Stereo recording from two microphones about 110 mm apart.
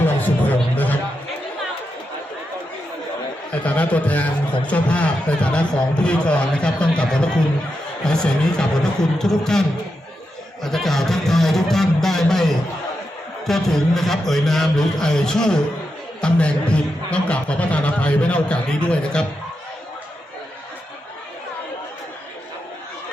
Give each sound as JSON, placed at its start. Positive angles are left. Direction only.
{"t": 0.0, "sound": "music", "side_deg": 15}
{"t": 3.6, "sound": "a man's voice", "side_deg": 15}
{"t": 10.6, "sound": "a sound", "side_deg": 5}
{"t": 13.5, "sound": "a man's voice", "side_deg": 5}